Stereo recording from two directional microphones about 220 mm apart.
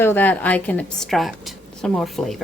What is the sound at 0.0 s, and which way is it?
A woman's voice, 10° left (ahead or behind).